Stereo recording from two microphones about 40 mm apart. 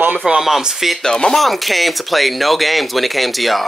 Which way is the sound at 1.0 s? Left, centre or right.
Centre.